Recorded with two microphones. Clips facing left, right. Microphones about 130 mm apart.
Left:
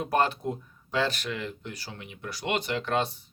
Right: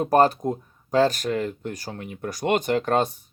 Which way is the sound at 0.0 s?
40° right (ahead or behind).